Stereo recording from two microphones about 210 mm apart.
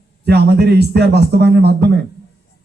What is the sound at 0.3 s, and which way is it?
A man's voice, 50° right (ahead or behind).